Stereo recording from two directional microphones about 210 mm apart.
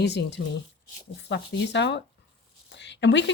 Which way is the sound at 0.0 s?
55° left (ahead or behind).